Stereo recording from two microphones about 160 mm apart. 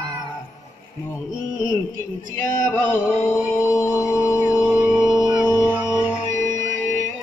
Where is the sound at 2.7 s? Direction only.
15° left (ahead or behind).